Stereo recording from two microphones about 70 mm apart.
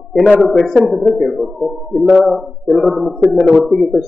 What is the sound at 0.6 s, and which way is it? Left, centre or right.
A man's voice, centre.